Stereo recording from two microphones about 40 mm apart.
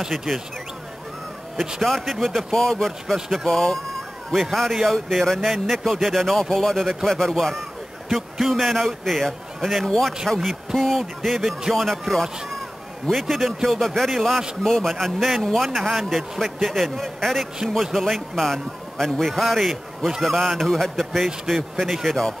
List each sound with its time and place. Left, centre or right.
0.3 s speech: centre
1.8 s a man's voice: centre
8.1 s a man's voice: centre